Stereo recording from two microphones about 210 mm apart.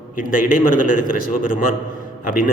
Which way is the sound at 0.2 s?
40° left (ahead or behind).